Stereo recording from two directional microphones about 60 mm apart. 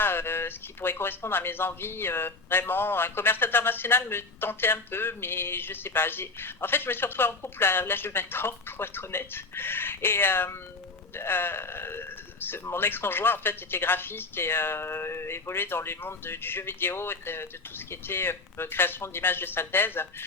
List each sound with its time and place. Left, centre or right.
0.0 s speech: left